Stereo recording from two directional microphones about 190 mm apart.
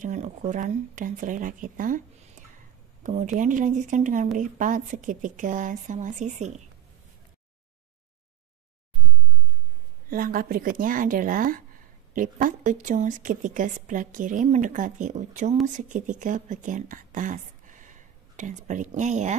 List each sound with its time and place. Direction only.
0.0 s a woman's voice: 40° right (ahead or behind)
10.0 s a woman's voice: 50° right (ahead or behind)